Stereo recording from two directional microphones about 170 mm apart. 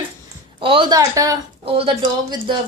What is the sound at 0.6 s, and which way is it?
Speech, 30° right (ahead or behind).